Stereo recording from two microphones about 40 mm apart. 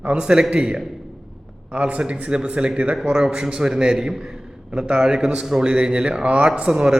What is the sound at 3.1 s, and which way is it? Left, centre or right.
A man's voice, centre.